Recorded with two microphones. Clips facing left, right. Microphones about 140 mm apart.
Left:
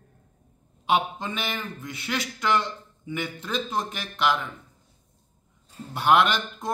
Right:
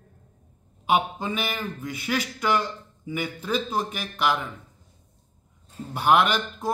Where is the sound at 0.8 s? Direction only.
10° right (ahead or behind).